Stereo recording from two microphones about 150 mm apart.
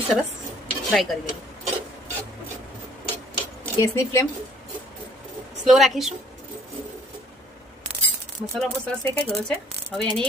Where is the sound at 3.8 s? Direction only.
20° left (ahead or behind).